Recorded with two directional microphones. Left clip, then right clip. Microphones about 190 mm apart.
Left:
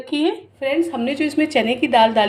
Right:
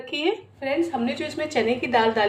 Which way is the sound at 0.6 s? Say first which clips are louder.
Left 5 dB; 55° left (ahead or behind).